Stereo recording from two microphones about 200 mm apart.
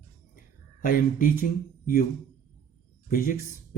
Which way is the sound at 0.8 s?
45° left (ahead or behind).